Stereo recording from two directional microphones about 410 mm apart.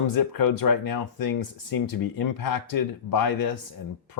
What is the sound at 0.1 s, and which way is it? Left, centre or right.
Speech, left.